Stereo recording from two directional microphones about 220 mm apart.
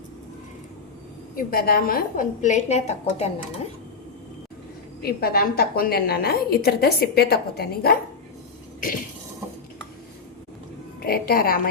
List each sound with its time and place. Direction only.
1.4 s a woman's voice: 40° left (ahead or behind)
5.0 s a woman's voice: 45° left (ahead or behind)
11.0 s a woman's voice: 45° left (ahead or behind)